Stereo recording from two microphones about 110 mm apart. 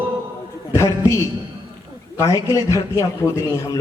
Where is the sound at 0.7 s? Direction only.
25° left (ahead or behind).